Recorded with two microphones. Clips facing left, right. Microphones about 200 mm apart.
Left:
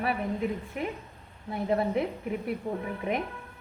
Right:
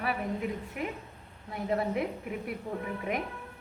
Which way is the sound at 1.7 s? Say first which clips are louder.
Left 3 dB; 30° left (ahead or behind).